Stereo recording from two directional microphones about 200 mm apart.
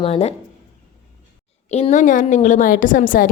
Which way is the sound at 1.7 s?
35° left (ahead or behind).